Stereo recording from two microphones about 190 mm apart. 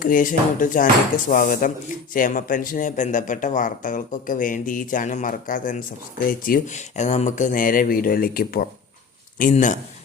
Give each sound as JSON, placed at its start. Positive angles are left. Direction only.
{"t": 0.0, "sound": "a man's voice", "side_deg": 45}
{"t": 9.4, "sound": "a man's voice", "side_deg": 40}